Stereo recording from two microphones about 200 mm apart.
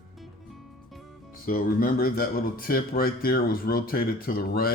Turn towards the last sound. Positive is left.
turn(degrees=50)  # may be behind; listen again after turning